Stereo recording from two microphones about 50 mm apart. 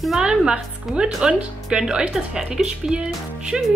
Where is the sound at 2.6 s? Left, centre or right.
Centre.